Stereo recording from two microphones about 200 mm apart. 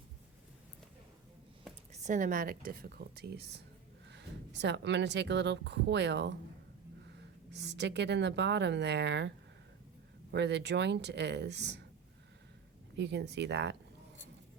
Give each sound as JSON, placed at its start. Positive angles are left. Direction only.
{"t": 1.9, "sound": "a woman's voice", "side_deg": -40}
{"t": 7.5, "sound": "a woman's voice", "side_deg": -60}
{"t": 10.3, "sound": "a woman's voice", "side_deg": -60}
{"t": 13.0, "sound": "a woman's voice", "side_deg": -60}